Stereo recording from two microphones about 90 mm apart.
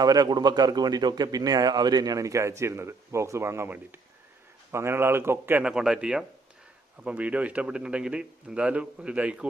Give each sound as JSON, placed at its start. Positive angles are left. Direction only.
{"t": 0.0, "sound": "a man's voice", "side_deg": -45}
{"t": 5.6, "sound": "a man's voice", "side_deg": -5}